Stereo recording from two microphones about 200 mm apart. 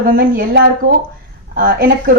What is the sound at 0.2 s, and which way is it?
A woman's voice, 55° right (ahead or behind).